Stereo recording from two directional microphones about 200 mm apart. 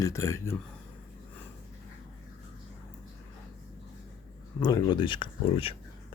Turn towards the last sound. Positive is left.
turn(degrees=25)  # may be behind; listen again after turning